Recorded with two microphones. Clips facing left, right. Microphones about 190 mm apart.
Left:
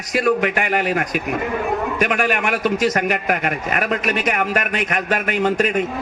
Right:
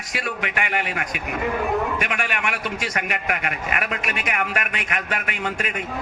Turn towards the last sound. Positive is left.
turn(degrees=40)  # may be behind; listen again after turning